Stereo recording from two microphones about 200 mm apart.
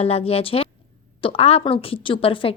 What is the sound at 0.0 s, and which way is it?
A woman's voice, 30° left (ahead or behind).